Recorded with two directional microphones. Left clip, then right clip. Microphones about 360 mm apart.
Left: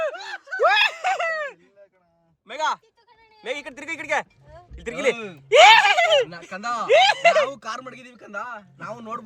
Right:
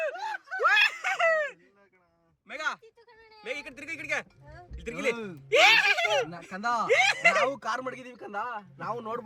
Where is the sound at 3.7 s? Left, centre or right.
Centre.